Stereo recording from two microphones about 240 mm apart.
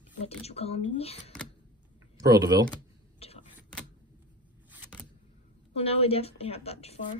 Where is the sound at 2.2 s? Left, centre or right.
Centre.